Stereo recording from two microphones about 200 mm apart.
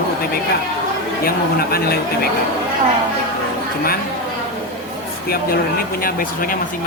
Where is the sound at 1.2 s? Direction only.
50° left (ahead or behind).